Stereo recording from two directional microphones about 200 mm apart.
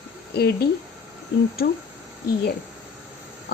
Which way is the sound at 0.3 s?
55° left (ahead or behind).